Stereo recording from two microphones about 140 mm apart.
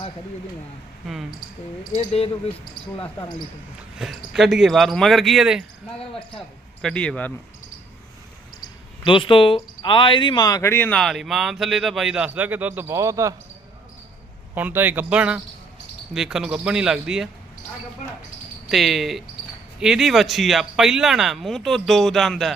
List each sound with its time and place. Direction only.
1.9 s speech: 40° left (ahead or behind)
3.9 s speech: 5° right (ahead or behind)
6.8 s speech: 5° left (ahead or behind)
9.0 s speech: 35° left (ahead or behind); by 13.3 s 20° right (ahead or behind)
14.5 s speech: 15° right (ahead or behind)
18.7 s speech: centre (ahead or behind)